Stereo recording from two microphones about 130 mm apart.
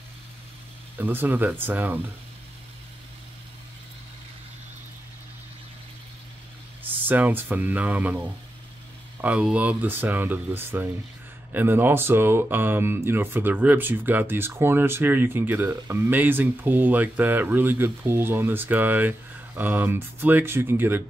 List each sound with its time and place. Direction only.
0.9 s speech: 15° right (ahead or behind)
6.8 s speech: 15° right (ahead or behind)